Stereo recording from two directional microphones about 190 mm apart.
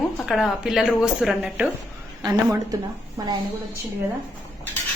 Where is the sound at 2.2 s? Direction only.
20° right (ahead or behind).